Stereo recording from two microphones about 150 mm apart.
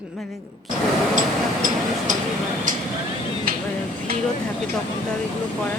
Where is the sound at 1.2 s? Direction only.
65° right (ahead or behind).